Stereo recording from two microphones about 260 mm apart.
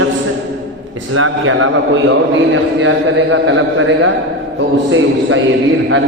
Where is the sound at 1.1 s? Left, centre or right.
Right.